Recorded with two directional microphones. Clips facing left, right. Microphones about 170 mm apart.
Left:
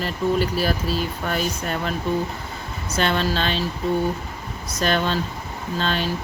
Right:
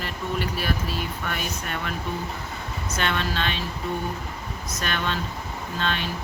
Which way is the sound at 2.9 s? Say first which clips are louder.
Left 5 dB; 30° left (ahead or behind).